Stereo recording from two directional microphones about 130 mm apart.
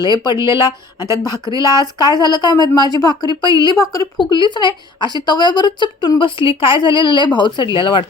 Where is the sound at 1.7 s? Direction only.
30° left (ahead or behind).